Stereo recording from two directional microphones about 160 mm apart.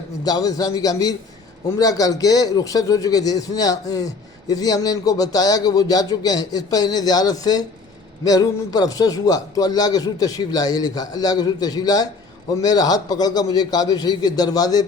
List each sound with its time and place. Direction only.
0.3 s a man's voice: 25° left (ahead or behind)